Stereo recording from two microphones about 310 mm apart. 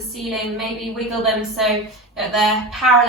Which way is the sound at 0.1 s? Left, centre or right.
Centre.